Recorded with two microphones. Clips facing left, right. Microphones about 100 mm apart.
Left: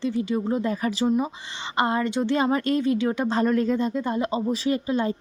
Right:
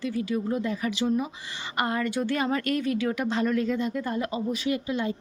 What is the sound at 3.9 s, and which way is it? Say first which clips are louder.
Speech: left 4 dB; 25° left (ahead or behind).